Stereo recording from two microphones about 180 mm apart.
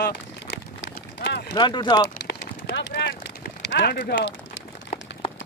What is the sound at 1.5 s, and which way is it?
Speech, 25° left (ahead or behind).